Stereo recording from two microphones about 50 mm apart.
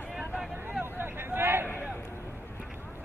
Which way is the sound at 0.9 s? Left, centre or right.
Right.